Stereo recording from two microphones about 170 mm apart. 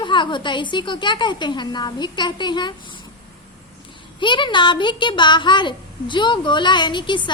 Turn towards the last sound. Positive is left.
turn(degrees=30)  # may be behind; listen again after turning